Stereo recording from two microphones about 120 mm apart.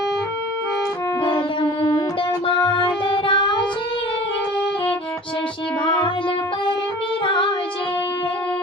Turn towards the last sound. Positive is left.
turn(degrees=40)  # may be behind; listen again after turning